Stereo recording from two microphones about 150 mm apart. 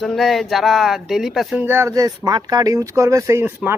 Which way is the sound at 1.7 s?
20° right (ahead or behind).